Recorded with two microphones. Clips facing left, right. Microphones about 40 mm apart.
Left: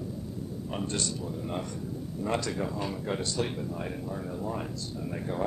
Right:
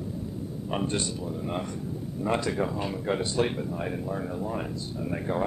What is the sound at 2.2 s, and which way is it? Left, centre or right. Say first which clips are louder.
Speech: right 4 dB; centre.